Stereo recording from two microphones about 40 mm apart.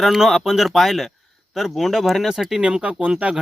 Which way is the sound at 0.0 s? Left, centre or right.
Centre.